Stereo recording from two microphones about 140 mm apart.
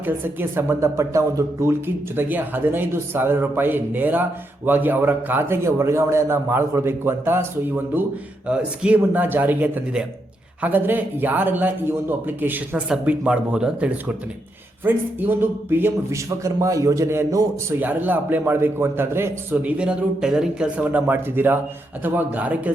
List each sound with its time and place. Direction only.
0.0 s a man's voice: 15° right (ahead or behind)